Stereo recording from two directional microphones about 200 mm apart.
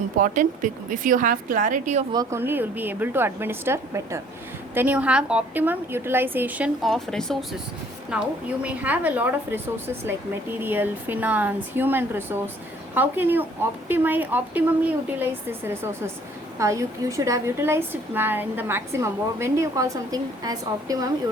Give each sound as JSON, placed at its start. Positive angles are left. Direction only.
{"t": 0.2, "sound": "a woman's voice", "side_deg": -40}
{"t": 2.1, "sound": "a woman's voice", "side_deg": -10}
{"t": 10.6, "sound": "a woman's voice", "side_deg": -10}